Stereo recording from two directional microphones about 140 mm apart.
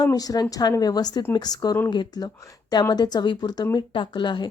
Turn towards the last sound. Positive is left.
turn(degrees=35)  # may be behind; listen again after turning